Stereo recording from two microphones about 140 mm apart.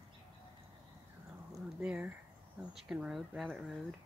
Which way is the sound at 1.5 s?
10° right (ahead or behind).